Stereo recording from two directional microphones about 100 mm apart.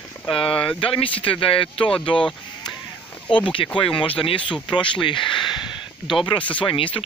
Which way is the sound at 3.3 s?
55° left (ahead or behind).